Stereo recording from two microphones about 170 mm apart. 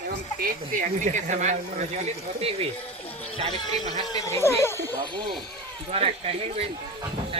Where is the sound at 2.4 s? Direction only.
35° right (ahead or behind).